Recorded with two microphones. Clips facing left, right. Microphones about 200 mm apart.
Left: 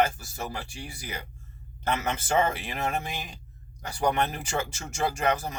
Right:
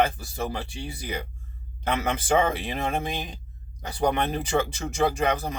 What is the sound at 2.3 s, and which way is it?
Speech, 20° right (ahead or behind).